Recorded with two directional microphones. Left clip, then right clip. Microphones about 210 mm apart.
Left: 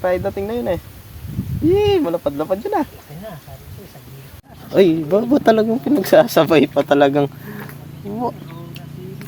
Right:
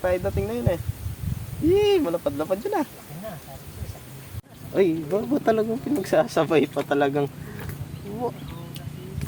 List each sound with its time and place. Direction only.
0.0 s speech: 25° left (ahead or behind)
4.7 s speech: 50° left (ahead or behind)